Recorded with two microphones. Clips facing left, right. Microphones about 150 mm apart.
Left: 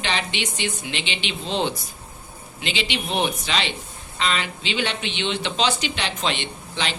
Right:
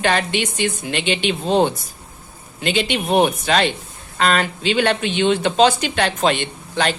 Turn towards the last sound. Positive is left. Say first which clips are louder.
# right 7 dB
turn(degrees=-50)  # may be behind; listen again after turning